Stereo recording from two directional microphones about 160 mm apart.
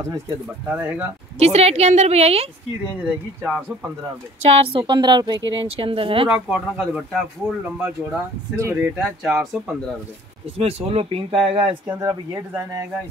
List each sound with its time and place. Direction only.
0.7 s speech: 10° right (ahead or behind)
1.4 s a woman's voice: 40° right (ahead or behind)
2.8 s speech: 5° right (ahead or behind)
4.4 s a woman's voice: 30° right (ahead or behind)
6.3 s speech: 5° right (ahead or behind)
8.5 s speech: 20° right (ahead or behind)
9.2 s speech: 5° right (ahead or behind)
10.6 s a woman's voice: 40° right (ahead or behind)
12.0 s speech: 20° right (ahead or behind)